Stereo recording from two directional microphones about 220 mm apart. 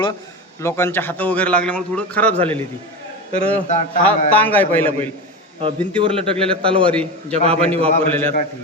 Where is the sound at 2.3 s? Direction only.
25° right (ahead or behind).